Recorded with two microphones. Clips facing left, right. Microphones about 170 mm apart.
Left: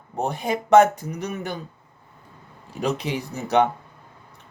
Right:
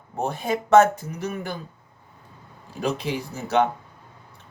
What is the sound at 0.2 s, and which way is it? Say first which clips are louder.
Speech: left 1 dB; 15° left (ahead or behind).